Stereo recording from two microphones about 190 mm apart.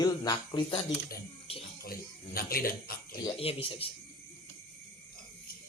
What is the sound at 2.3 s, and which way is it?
Speech, 50° left (ahead or behind).